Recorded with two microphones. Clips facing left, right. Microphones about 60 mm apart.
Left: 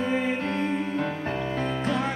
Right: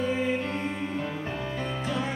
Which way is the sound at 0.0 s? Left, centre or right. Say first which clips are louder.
Left 1 dB; left.